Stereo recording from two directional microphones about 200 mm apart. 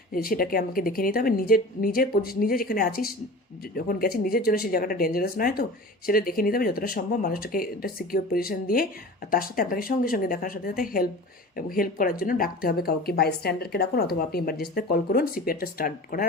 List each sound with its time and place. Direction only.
0.1 s speech: 45° left (ahead or behind)